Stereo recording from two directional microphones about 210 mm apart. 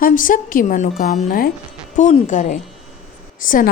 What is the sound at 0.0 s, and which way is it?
A woman's voice, 40° left (ahead or behind).